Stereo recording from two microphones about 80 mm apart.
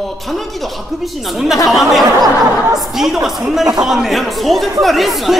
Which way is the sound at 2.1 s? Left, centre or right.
Right.